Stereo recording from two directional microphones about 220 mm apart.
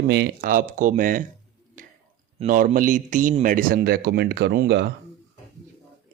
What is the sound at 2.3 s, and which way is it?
A man's voice, 35° right (ahead or behind).